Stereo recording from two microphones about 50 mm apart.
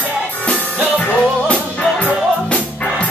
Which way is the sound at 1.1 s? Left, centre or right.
Left.